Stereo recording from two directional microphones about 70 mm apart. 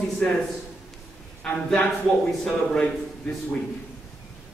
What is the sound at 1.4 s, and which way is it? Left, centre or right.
A man's voice, centre.